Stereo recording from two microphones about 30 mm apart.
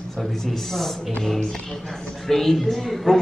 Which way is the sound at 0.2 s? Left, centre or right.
Centre.